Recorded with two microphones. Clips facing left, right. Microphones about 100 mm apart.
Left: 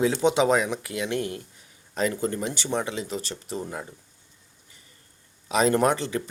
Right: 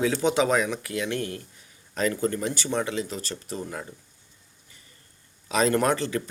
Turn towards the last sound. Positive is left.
turn(degrees=20)  # may be behind; listen again after turning